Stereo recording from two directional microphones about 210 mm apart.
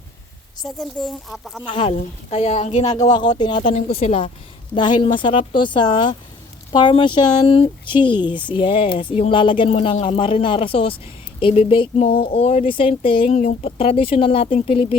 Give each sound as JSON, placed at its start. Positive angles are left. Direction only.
{"t": 0.6, "sound": "a woman's voice", "side_deg": 0}
{"t": 1.7, "sound": "speech", "side_deg": 30}
{"t": 3.1, "sound": "speech", "side_deg": 20}
{"t": 3.7, "sound": "speech", "side_deg": 35}